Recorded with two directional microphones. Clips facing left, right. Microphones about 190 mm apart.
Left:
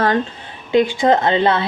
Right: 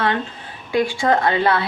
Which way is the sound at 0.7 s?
20° left (ahead or behind).